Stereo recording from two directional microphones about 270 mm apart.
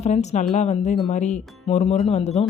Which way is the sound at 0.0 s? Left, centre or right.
Left.